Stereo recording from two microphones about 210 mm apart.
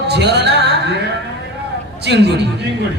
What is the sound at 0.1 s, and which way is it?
Music, 50° right (ahead or behind).